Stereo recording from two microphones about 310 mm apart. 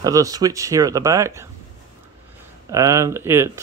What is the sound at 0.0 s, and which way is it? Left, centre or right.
Speech, centre.